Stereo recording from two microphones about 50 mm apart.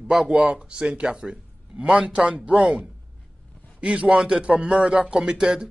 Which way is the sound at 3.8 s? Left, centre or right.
Right.